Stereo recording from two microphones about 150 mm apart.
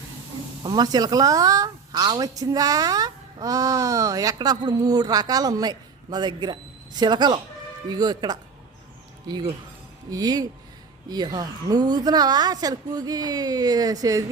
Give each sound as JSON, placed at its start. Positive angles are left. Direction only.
{"t": 0.6, "sound": "speech", "side_deg": -25}